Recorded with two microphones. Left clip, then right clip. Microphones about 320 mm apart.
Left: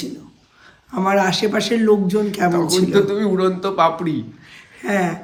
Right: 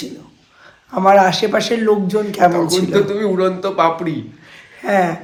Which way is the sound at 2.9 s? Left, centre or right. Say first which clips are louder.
Right 1 dB; centre.